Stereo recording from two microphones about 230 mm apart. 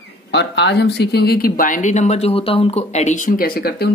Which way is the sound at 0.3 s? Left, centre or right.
Left.